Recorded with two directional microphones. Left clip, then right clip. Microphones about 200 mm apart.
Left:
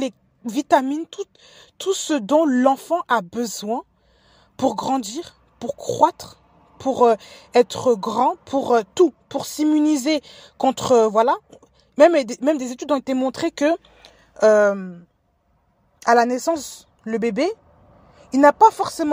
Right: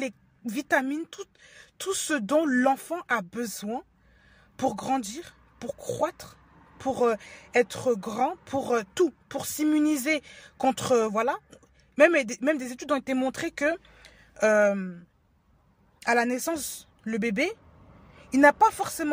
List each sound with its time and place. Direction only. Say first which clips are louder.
0.0 s a woman's voice: left 7 dB; 20° left (ahead or behind)
16.3 s speech: left 8 dB; 15° left (ahead or behind)
18.1 s a sound: left 5 dB; 15° left (ahead or behind)